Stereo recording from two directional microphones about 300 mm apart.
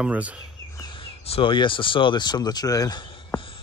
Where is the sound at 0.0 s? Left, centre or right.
Centre.